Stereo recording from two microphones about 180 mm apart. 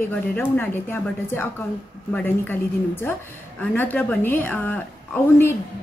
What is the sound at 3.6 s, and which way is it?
A woman's voice, 10° left (ahead or behind).